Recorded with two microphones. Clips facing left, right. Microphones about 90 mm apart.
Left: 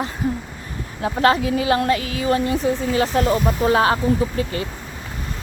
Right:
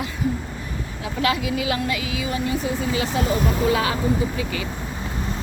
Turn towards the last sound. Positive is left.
turn(degrees=45)  # may be behind; listen again after turning